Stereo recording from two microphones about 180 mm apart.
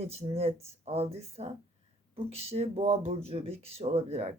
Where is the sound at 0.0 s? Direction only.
35° right (ahead or behind).